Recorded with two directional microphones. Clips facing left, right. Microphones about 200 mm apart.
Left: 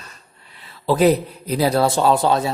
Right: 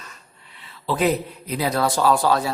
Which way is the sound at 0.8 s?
40° left (ahead or behind).